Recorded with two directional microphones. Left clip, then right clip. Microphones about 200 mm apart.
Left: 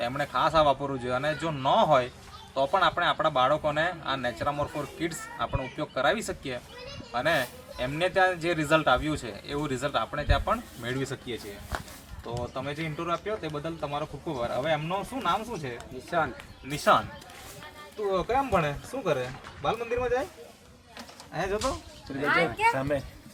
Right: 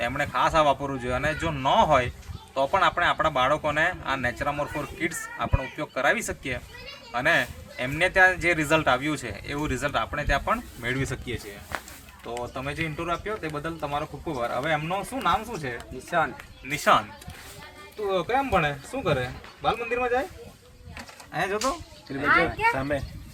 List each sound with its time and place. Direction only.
0.0 s speech: 10° right (ahead or behind)
12.4 s speech: 5° right (ahead or behind)
16.0 s speech: 15° left (ahead or behind)
16.7 s speech: 15° right (ahead or behind)
18.1 s speech: centre (ahead or behind)
21.3 s speech: 10° right (ahead or behind)
22.2 s speech: 65° left (ahead or behind)
22.7 s speech: 35° left (ahead or behind)